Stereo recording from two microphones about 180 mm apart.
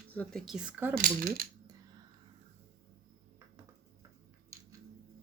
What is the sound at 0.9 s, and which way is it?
Speech, 50° right (ahead or behind).